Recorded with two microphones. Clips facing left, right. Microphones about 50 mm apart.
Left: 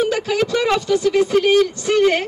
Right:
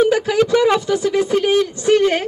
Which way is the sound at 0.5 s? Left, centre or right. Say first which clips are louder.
Right 3 dB; centre.